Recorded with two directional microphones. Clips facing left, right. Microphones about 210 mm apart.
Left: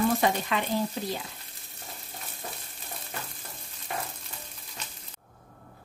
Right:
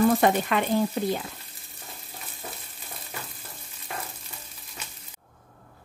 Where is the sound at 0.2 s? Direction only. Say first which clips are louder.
Right 4 dB; 55° right (ahead or behind).